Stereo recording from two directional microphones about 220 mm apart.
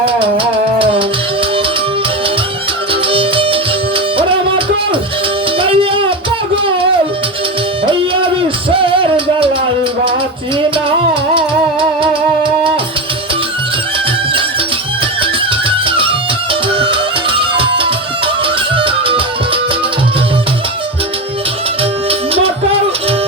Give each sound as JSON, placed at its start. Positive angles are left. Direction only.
{"t": 0.0, "sound": "music", "side_deg": -25}
{"t": 2.9, "sound": "music", "side_deg": -25}
{"t": 8.7, "sound": "music", "side_deg": -25}
{"t": 11.1, "sound": "music", "side_deg": -25}
{"t": 16.7, "sound": "music", "side_deg": -25}